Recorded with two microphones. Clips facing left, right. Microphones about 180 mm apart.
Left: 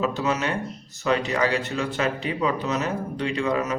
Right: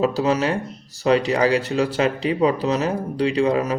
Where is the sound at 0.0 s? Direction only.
35° right (ahead or behind).